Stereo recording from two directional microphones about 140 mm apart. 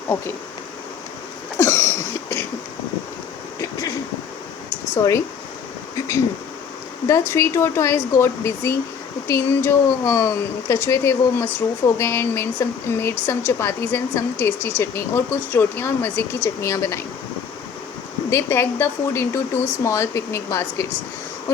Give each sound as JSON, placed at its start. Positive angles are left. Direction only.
{"t": 1.5, "sound": "cough", "side_deg": 20}
{"t": 3.6, "sound": "a sound", "side_deg": 25}
{"t": 4.9, "sound": "speech", "side_deg": 20}
{"t": 7.1, "sound": "speech", "side_deg": 20}
{"t": 18.3, "sound": "speech", "side_deg": 15}